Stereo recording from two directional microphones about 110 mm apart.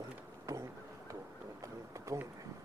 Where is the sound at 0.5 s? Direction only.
30° right (ahead or behind).